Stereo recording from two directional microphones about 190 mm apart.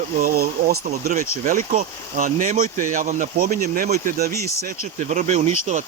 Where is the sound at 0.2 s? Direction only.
55° right (ahead or behind).